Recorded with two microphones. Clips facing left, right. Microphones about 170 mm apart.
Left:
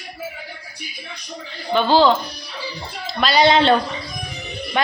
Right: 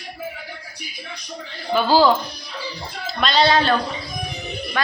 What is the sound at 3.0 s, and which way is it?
Speech, 5° left (ahead or behind).